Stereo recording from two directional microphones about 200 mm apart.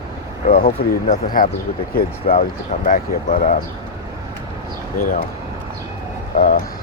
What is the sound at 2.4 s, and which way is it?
Speech, 40° left (ahead or behind).